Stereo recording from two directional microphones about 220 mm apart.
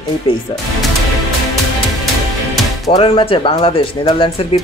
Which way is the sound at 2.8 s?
20° left (ahead or behind).